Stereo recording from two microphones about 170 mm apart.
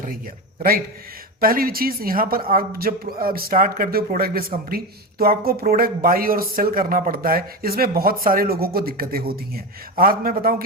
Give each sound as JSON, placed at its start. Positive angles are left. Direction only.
{"t": 1.4, "sound": "speech", "side_deg": -60}